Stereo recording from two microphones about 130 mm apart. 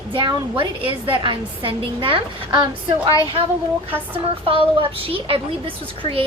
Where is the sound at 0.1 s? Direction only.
40° right (ahead or behind).